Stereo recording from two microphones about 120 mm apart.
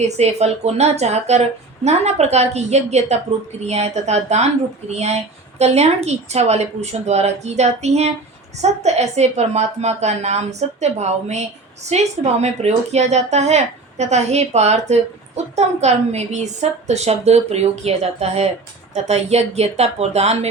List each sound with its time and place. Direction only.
0.0 s a woman's voice: 65° right (ahead or behind)